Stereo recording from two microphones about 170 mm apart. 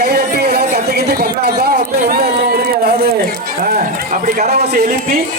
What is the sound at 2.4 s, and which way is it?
Run, 65° right (ahead or behind).